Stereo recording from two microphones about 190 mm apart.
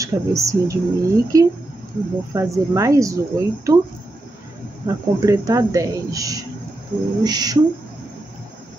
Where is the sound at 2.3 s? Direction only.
15° right (ahead or behind).